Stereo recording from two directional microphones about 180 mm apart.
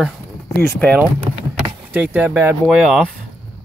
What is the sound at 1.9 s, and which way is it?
Speech, 10° right (ahead or behind).